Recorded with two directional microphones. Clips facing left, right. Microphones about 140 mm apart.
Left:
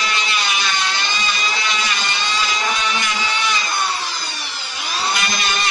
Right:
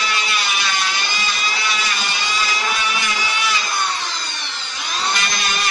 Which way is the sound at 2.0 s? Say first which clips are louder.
Left 1 dB; 10° right (ahead or behind).